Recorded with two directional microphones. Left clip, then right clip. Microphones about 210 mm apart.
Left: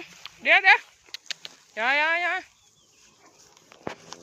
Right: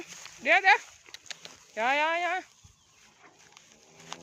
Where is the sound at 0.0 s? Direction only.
10° right (ahead or behind).